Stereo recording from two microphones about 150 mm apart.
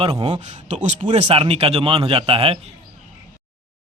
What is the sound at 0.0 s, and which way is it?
Speech, 35° right (ahead or behind).